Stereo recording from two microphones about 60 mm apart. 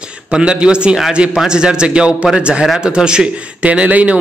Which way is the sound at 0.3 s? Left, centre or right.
Centre.